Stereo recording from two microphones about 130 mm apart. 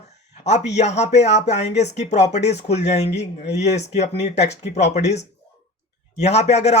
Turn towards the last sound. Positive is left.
turn(degrees=60)  # may be behind; listen again after turning